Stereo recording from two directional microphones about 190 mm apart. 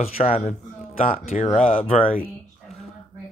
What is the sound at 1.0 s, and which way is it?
Speech, 45° left (ahead or behind).